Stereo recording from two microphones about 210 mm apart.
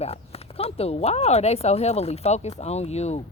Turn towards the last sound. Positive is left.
turn(degrees=30)  # may be behind; listen again after turning